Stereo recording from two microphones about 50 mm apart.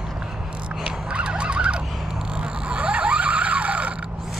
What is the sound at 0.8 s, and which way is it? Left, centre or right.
Emergency vehicle, centre.